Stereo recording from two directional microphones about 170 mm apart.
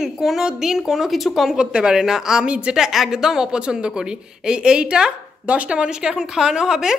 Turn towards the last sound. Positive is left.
turn(degrees=-5)  # may be behind; listen again after turning